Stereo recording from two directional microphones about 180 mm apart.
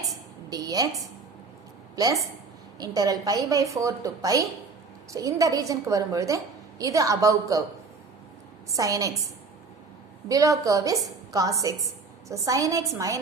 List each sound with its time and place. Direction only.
0.5 s a woman's voice: 20° right (ahead or behind)
2.7 s a woman's voice: 20° right (ahead or behind)
8.7 s a woman's voice: 20° right (ahead or behind)